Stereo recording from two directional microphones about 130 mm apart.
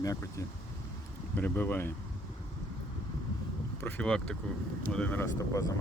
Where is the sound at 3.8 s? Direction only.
5° left (ahead or behind).